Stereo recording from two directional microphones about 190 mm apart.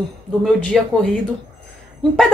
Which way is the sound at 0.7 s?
Centre (ahead or behind).